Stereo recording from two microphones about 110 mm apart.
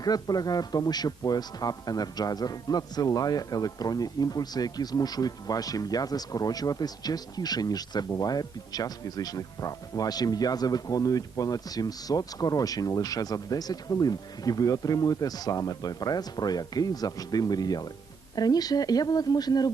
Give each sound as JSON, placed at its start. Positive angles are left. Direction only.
{"t": 0.0, "sound": "a man's voice", "side_deg": 35}